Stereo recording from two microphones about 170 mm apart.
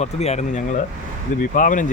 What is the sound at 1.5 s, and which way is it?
Speech, 50° left (ahead or behind).